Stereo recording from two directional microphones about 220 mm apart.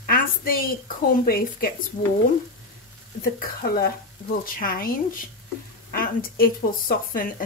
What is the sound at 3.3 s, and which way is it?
Speech, 40° left (ahead or behind).